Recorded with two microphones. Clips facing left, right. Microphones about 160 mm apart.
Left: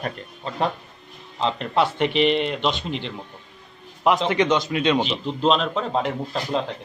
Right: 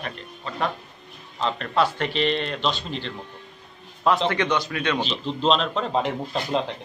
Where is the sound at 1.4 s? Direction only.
20° left (ahead or behind).